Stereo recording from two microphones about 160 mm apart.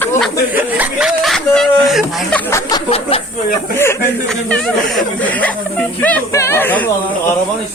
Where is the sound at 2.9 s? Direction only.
40° left (ahead or behind).